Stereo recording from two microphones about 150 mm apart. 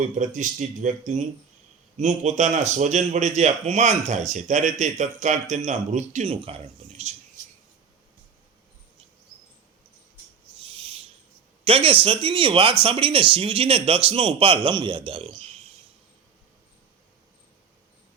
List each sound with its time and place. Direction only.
0.2 s a man's voice: 55° right (ahead or behind)
11.6 s speech: 40° right (ahead or behind)